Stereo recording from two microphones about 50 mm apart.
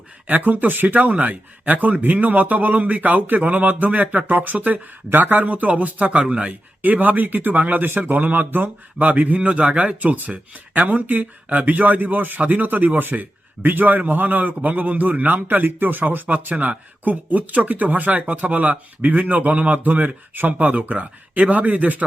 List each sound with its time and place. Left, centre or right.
0.3 s a man's voice: right
6.8 s a man's voice: right